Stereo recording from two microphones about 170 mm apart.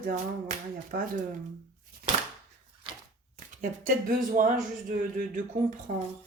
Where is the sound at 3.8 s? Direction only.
50° right (ahead or behind).